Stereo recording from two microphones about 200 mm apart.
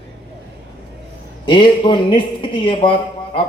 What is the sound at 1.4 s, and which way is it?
A man's voice, 25° left (ahead or behind).